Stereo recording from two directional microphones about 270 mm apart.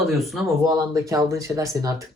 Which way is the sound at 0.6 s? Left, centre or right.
Centre.